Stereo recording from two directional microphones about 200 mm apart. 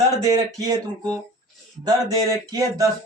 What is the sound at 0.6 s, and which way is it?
Speech, 20° right (ahead or behind).